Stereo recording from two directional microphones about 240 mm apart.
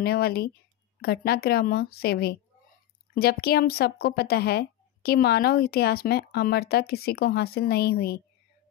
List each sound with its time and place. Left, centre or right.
0.0 s speech: left